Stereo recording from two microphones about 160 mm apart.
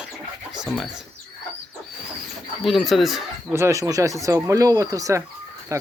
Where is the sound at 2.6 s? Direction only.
Centre (ahead or behind).